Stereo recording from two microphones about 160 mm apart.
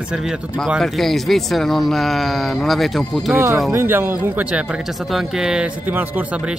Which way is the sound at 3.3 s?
15° right (ahead or behind).